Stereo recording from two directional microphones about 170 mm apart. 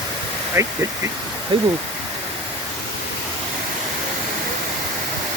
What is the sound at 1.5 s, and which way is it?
Speech, 30° right (ahead or behind).